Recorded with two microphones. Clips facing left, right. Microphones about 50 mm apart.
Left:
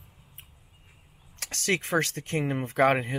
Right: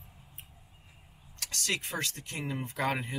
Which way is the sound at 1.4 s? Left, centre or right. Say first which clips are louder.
Left 6 dB; left.